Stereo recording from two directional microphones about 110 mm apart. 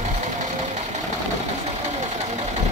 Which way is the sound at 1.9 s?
90° right.